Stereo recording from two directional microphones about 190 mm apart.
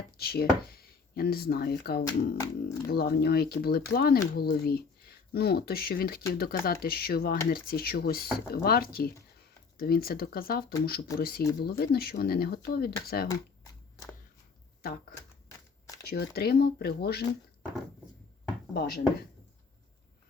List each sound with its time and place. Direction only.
0.2 s speech: 55° left (ahead or behind)
2.0 s speech: 20° left (ahead or behind)
2.8 s speech: 55° left (ahead or behind)
14.8 s speech: 50° left (ahead or behind)
16.0 s speech: 55° left (ahead or behind)
18.7 s speech: 55° left (ahead or behind)